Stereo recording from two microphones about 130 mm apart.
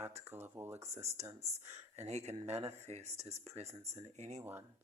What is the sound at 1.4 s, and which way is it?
Speech, 60° right (ahead or behind).